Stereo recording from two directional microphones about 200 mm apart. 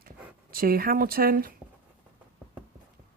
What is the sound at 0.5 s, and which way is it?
Speech, 45° right (ahead or behind).